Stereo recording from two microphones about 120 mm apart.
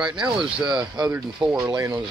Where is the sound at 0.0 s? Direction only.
5° right (ahead or behind).